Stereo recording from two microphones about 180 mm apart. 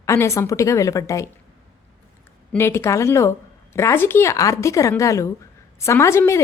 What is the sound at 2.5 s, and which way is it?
A woman's voice, 15° left (ahead or behind).